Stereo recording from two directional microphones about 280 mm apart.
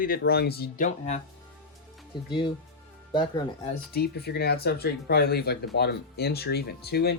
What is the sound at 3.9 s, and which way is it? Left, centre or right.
Speech, left.